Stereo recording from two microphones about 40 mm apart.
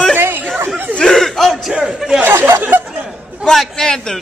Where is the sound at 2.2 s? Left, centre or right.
Right.